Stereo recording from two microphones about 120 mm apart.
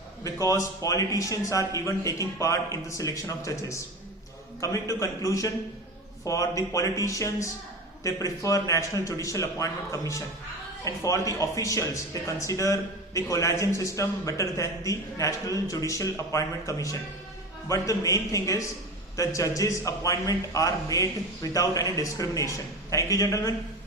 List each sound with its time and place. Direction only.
0.3 s speech: 25° left (ahead or behind)